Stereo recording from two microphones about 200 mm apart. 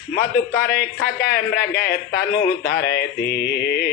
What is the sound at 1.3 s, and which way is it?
Music, 50° left (ahead or behind).